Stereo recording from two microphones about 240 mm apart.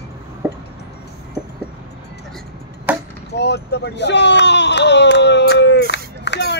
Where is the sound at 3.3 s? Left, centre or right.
Left.